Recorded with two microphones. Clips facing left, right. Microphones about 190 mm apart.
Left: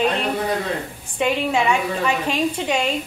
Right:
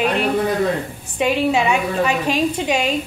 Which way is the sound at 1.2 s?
15° right (ahead or behind).